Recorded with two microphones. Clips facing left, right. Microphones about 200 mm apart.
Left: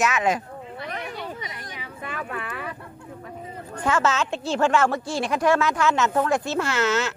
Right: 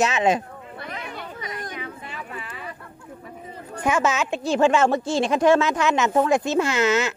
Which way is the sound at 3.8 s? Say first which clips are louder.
Right 1 dB; 15° right (ahead or behind).